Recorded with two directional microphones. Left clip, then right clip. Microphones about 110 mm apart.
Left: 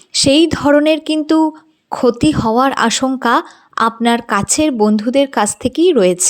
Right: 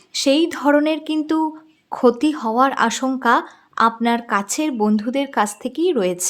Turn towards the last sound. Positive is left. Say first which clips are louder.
# left 8 dB
turn(degrees=45)  # may be behind; listen again after turning